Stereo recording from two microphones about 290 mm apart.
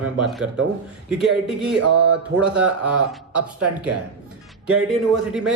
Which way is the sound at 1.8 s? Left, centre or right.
Right.